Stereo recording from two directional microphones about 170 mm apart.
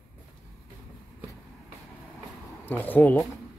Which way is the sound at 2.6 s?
10° left (ahead or behind).